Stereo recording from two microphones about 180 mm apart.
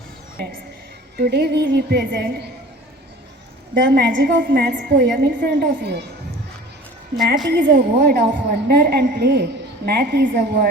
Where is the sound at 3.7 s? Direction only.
65° right (ahead or behind).